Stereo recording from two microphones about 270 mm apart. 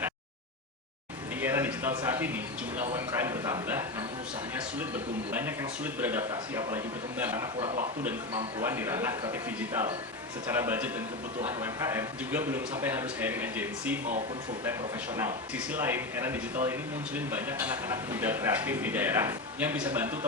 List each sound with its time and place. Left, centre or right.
1.4 s a sound: centre
2.0 s a man's voice: centre
5.3 s a man's voice: centre
7.6 s a man's voice: right; by 14.0 s centre
15.1 s a man's voice: centre